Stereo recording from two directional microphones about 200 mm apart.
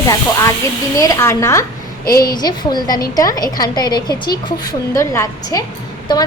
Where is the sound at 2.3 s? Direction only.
20° left (ahead or behind).